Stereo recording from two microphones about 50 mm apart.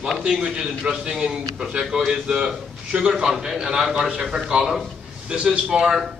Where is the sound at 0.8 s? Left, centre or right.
Centre.